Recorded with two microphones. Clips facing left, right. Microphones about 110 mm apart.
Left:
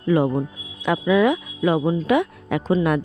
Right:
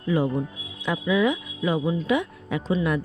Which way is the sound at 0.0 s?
60° left (ahead or behind).